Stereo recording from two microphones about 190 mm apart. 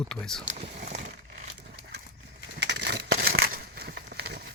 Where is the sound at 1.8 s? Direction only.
60° right (ahead or behind).